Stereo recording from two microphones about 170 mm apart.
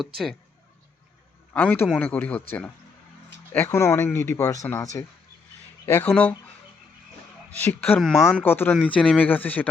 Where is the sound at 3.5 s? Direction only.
15° left (ahead or behind).